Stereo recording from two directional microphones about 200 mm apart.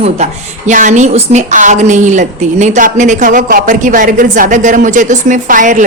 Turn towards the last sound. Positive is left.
turn(degrees=-40)  # may be behind; listen again after turning